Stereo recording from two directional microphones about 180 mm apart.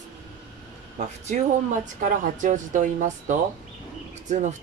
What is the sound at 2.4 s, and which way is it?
Speech, 45° right (ahead or behind).